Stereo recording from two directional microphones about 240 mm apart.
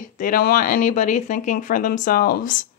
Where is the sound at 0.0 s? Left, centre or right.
Left.